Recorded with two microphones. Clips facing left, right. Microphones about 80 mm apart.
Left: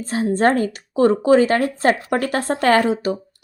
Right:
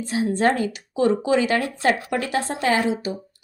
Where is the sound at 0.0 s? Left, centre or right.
Left.